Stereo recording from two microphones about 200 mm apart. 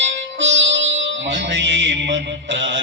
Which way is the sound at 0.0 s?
65° right (ahead or behind).